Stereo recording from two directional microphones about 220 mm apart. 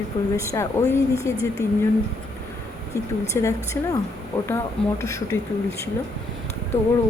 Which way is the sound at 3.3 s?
15° left (ahead or behind).